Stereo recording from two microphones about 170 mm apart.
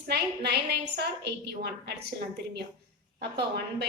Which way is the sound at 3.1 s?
70° right (ahead or behind).